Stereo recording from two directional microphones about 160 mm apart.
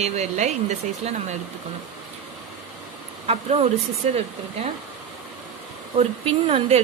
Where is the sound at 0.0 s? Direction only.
45° right (ahead or behind).